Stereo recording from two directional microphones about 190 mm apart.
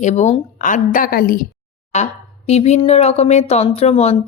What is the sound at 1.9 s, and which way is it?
Speech, 35° left (ahead or behind).